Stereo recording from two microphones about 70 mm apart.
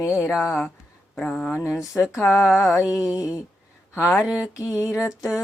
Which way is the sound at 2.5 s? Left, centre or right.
Centre.